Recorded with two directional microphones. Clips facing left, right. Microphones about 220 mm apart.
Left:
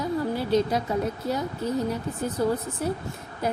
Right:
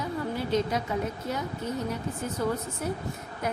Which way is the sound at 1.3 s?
35° left (ahead or behind).